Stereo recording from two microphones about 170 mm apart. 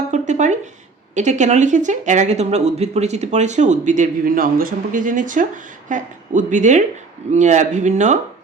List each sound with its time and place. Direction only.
0.1 s speech: 45° right (ahead or behind)